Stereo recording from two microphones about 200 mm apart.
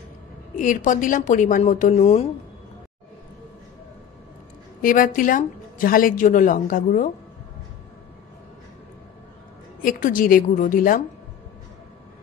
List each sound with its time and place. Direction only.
0.6 s speech: 40° left (ahead or behind)
4.8 s a woman's voice: 40° left (ahead or behind)
9.8 s a woman's voice: 45° left (ahead or behind)